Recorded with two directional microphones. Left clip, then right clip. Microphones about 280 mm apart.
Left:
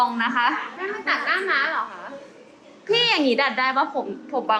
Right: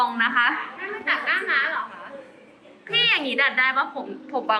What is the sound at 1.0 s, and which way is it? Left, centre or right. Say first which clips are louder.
Speech: even; left.